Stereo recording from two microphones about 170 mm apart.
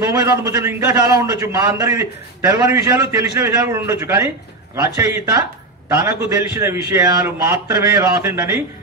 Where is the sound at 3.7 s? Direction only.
15° right (ahead or behind).